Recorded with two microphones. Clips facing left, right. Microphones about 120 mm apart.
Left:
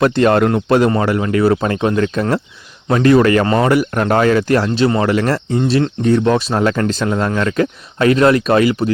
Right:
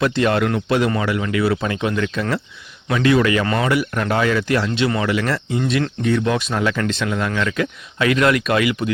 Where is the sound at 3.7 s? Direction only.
45° left (ahead or behind).